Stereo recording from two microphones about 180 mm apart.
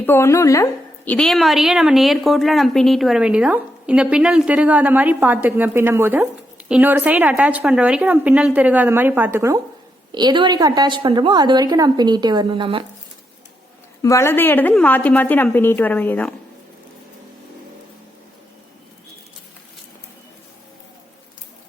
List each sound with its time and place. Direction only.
0.0 s a woman's voice: 15° left (ahead or behind)
1.1 s a woman's voice: 5° left (ahead or behind); by 12.8 s 25° right (ahead or behind)
14.0 s a woman's voice: 15° left (ahead or behind)